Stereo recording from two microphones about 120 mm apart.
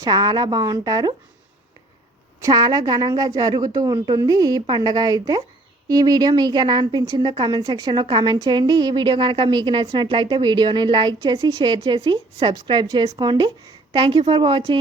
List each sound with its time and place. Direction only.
0.0 s a woman's voice: 35° right (ahead or behind)
2.4 s a woman's voice: 35° right (ahead or behind)